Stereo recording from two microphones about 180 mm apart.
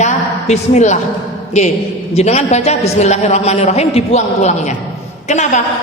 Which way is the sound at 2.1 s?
35° left (ahead or behind).